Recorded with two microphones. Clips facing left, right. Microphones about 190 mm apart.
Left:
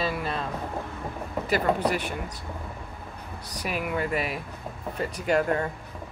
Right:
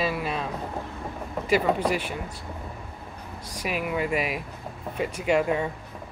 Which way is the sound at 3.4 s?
10° right (ahead or behind).